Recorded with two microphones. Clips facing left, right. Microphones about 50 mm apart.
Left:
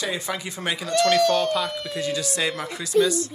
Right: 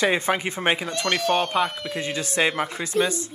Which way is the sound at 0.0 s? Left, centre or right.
Right.